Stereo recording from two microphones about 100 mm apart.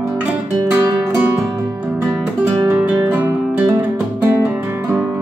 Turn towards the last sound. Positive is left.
turn(degrees=-15)  # may be behind; listen again after turning